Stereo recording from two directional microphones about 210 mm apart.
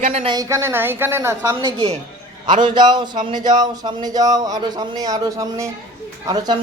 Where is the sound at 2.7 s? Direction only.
20° right (ahead or behind).